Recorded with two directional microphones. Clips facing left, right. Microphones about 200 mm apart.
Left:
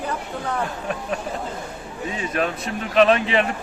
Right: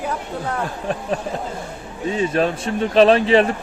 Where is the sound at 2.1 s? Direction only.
30° right (ahead or behind).